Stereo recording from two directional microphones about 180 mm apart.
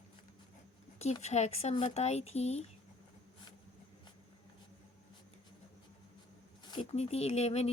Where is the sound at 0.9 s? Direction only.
40° left (ahead or behind).